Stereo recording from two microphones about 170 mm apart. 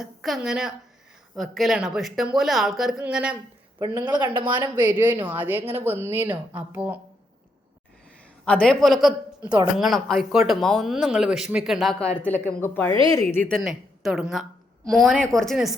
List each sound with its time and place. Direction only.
0.0 s speech: centre (ahead or behind)
3.8 s a woman's voice: 20° right (ahead or behind)
8.6 s a woman's voice: 5° left (ahead or behind)
13.6 s a woman's voice: 5° right (ahead or behind)